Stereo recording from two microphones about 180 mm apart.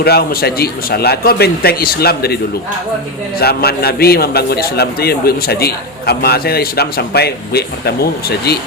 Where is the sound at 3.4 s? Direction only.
60° left (ahead or behind).